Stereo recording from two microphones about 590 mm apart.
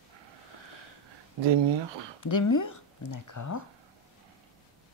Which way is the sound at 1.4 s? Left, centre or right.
Right.